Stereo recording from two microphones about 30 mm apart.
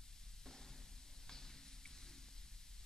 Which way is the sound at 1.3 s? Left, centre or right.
Centre.